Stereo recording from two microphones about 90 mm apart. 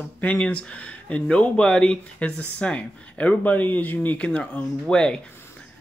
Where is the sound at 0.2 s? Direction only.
10° left (ahead or behind).